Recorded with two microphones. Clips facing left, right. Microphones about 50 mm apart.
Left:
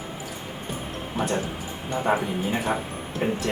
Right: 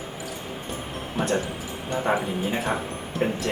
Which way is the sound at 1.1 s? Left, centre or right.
Centre.